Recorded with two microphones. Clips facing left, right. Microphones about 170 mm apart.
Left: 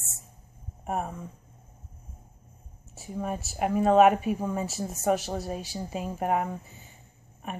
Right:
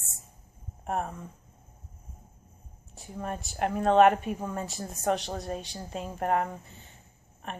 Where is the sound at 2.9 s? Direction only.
5° left (ahead or behind).